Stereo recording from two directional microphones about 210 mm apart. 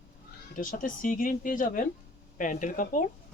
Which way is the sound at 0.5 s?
40° left (ahead or behind).